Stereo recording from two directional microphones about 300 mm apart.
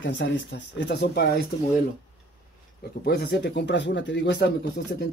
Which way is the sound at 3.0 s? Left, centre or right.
Left.